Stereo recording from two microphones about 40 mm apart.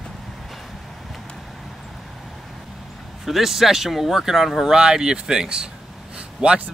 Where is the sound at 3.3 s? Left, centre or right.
Centre.